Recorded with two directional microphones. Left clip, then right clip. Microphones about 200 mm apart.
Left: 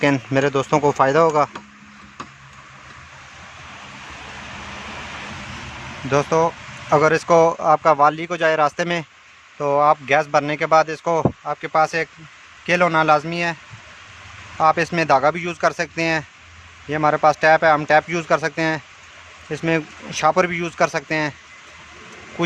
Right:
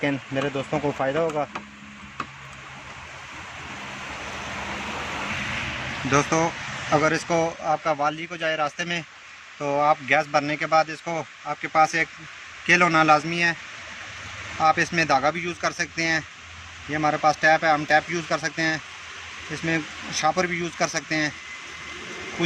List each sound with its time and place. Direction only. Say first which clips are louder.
0.0 s speech: left 8 dB; 60° left (ahead or behind)
6.1 s a man's voice: left 4 dB; 35° left (ahead or behind)
14.6 s speech: left 3 dB; 50° left (ahead or behind)